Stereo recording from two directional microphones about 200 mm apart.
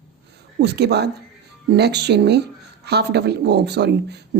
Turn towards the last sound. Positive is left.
turn(degrees=-55)  # may be behind; listen again after turning